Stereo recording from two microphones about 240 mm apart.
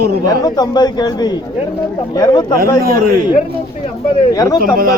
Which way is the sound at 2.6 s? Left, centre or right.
Right.